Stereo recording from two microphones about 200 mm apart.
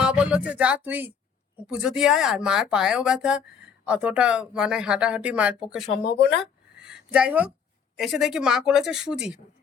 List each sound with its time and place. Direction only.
0.0 s speech: 5° right (ahead or behind)
6.1 s speech: 55° left (ahead or behind)
6.4 s a sound: 5° right (ahead or behind)
7.9 s speech: centre (ahead or behind)